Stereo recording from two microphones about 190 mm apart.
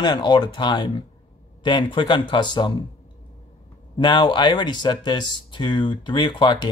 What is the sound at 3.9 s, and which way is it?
Speech, 25° left (ahead or behind).